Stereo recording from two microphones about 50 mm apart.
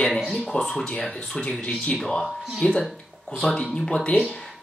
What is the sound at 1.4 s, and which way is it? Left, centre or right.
Speech, left.